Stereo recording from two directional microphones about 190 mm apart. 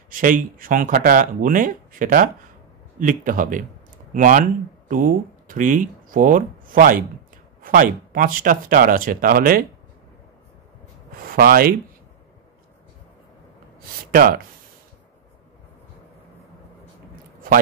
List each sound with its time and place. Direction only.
0.1 s speech: 45° right (ahead or behind)
11.2 s speech: 50° right (ahead or behind)
13.7 s speech: 50° right (ahead or behind)